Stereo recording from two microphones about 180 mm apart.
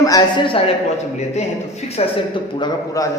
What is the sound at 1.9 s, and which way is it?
A woman's voice, 30° left (ahead or behind).